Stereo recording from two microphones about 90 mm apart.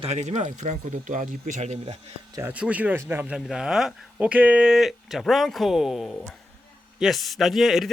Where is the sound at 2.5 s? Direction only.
15° right (ahead or behind).